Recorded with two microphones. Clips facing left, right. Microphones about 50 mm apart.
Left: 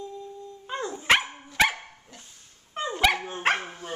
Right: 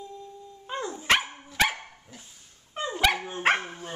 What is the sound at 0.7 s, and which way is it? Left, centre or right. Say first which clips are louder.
Dog: left 2 dB; centre.